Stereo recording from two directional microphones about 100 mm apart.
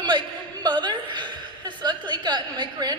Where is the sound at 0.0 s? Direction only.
50° right (ahead or behind).